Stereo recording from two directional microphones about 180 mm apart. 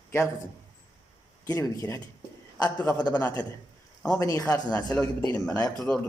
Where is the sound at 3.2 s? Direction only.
10° left (ahead or behind).